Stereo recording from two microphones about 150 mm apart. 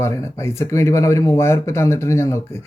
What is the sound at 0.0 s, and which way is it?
A woman's voice, 20° left (ahead or behind).